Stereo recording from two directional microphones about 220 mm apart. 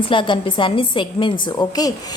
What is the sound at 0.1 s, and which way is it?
A woman's voice, 20° left (ahead or behind).